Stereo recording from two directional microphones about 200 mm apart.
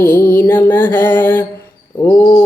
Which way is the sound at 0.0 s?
10° left (ahead or behind).